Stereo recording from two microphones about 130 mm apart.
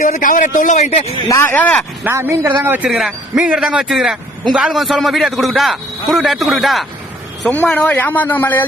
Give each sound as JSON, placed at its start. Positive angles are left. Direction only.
{"t": 0.0, "sound": "a man's voice", "side_deg": 85}
{"t": 1.5, "sound": "speech", "side_deg": 10}
{"t": 2.0, "sound": "a man's voice", "side_deg": -20}
{"t": 7.4, "sound": "speech", "side_deg": 15}